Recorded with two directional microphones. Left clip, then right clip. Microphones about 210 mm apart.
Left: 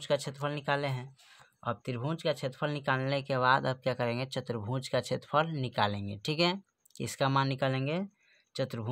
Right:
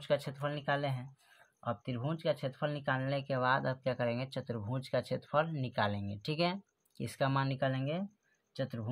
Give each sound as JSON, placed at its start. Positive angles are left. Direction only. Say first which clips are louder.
{"t": 0.0, "sound": "speech", "louder": "left 2 dB", "side_deg": 20}